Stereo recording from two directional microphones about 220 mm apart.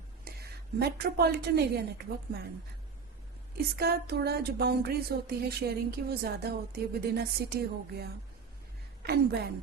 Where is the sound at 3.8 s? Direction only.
45° right (ahead or behind).